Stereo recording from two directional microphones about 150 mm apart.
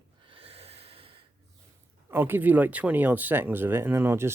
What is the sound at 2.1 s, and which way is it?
Speech, 15° right (ahead or behind).